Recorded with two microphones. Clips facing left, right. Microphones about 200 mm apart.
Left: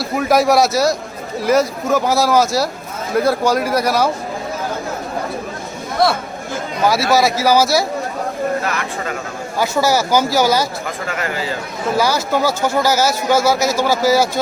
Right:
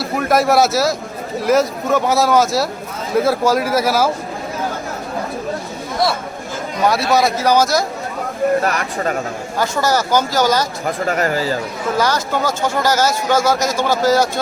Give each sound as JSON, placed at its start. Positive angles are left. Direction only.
{"t": 0.0, "sound": "speech", "side_deg": 0}
{"t": 6.8, "sound": "speech", "side_deg": 0}
{"t": 8.6, "sound": "speech", "side_deg": -45}
{"t": 9.6, "sound": "speech", "side_deg": 10}
{"t": 11.0, "sound": "speech", "side_deg": -40}
{"t": 11.9, "sound": "speech", "side_deg": 10}